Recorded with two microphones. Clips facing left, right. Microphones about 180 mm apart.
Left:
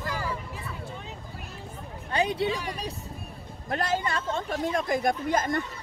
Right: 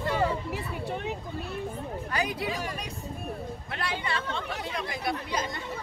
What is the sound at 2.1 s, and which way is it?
Speech, 25° left (ahead or behind).